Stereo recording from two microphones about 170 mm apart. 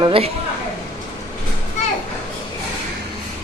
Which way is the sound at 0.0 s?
30° right (ahead or behind).